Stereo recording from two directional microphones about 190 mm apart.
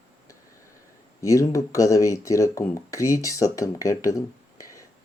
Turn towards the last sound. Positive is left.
turn(degrees=15)  # may be behind; listen again after turning